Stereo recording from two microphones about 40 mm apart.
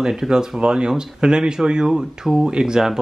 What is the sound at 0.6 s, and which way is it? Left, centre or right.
Speech, right.